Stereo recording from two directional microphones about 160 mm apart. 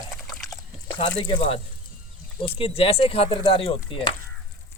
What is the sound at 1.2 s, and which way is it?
Speech, 35° left (ahead or behind).